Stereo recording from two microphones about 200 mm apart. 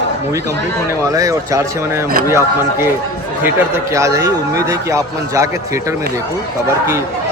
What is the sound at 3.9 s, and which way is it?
A man's voice, 15° right (ahead or behind).